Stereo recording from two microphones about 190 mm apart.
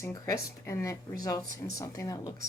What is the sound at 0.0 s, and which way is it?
Speech, 15° left (ahead or behind).